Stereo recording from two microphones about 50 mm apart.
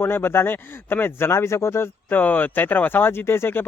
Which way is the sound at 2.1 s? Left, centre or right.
Left.